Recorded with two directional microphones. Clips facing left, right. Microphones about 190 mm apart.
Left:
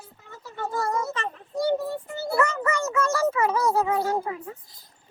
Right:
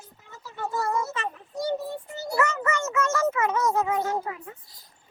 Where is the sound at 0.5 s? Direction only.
45° left (ahead or behind).